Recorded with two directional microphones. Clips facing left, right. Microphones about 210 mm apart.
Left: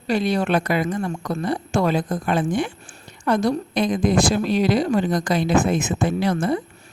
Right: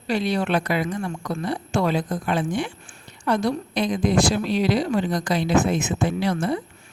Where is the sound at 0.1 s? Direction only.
45° left (ahead or behind).